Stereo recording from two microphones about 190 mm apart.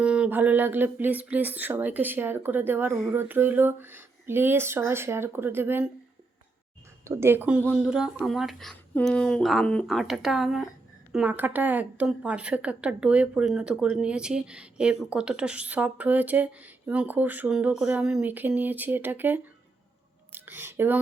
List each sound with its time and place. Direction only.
0.0 s a woman's voice: 5° right (ahead or behind)
7.0 s a woman's voice: 15° right (ahead or behind)